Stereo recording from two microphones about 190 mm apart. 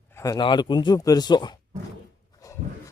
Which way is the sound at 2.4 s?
15° left (ahead or behind).